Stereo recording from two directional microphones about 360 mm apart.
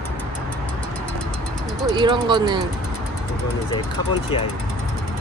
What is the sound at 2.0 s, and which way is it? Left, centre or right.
Speech, centre.